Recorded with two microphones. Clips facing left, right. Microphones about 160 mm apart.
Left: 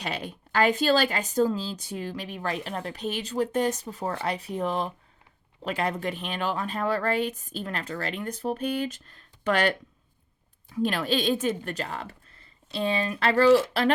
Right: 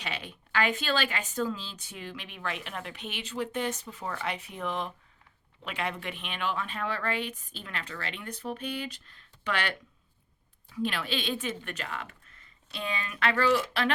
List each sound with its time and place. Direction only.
0.0 s a woman's voice: 45° left (ahead or behind)